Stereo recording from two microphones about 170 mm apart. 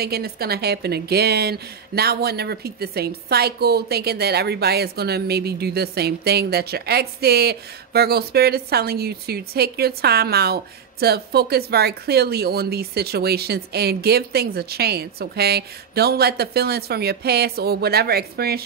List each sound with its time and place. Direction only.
0.0 s a woman's voice: 65° right (ahead or behind)